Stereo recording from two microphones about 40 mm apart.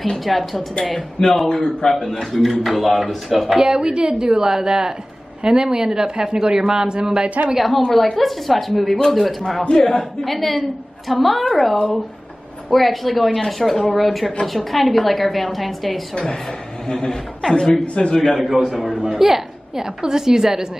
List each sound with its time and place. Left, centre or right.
0.0 s speech: centre
1.2 s a man's voice: left
2.0 s a woman's voice: centre
3.5 s a woman's voice: centre
7.5 s speech: centre
9.6 s a man's voice: left
9.8 s speech: centre
16.8 s a woman's voice: centre
18.3 s a woman's voice: centre